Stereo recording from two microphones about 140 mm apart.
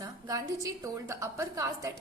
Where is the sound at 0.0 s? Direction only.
25° right (ahead or behind).